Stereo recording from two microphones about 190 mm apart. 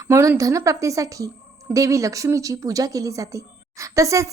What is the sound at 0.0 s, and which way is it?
A woman's voice, 15° right (ahead or behind).